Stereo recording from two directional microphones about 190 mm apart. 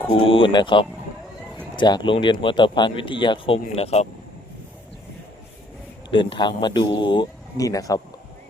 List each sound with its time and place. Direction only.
0.1 s speech: 30° left (ahead or behind)
6.1 s speech: 25° left (ahead or behind)